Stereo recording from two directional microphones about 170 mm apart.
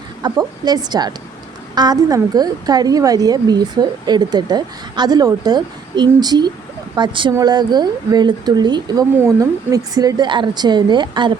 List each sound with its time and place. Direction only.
0.2 s a woman's voice: 25° right (ahead or behind)